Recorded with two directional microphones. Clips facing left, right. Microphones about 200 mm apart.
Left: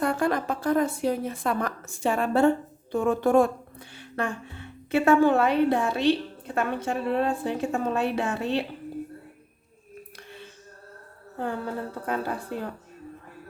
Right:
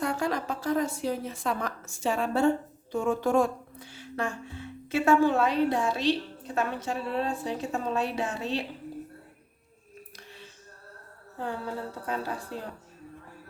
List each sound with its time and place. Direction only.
0.0 s a woman's voice: 55° left (ahead or behind)
12.0 s a woman's voice: 55° left (ahead or behind)